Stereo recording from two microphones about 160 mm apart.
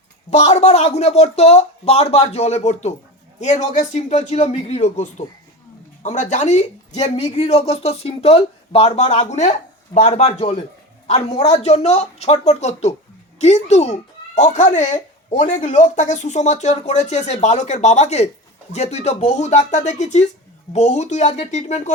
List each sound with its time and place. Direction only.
0.3 s speech: 45° left (ahead or behind)
11.6 s speech: 40° left (ahead or behind)